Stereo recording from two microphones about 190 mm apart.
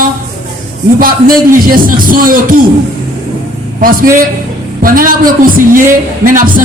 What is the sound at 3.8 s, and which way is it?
Music, 45° right (ahead or behind).